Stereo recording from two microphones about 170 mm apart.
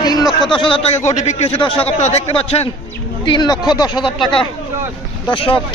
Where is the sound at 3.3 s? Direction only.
25° left (ahead or behind).